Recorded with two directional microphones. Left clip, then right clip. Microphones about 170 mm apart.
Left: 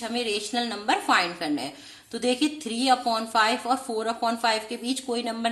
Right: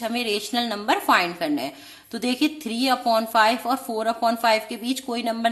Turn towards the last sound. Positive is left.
turn(degrees=-30)  # may be behind; listen again after turning